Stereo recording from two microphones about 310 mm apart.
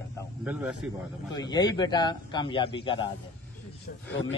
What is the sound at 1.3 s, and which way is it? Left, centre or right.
A man's voice, centre.